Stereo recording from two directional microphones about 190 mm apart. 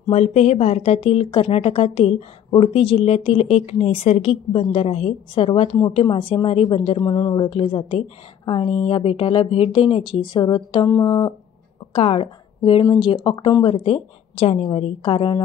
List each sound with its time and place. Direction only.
0.1 s speech: 35° left (ahead or behind)